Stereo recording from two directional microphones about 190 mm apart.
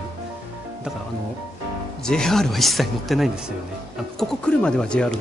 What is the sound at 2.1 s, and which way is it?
Speech, 5° left (ahead or behind).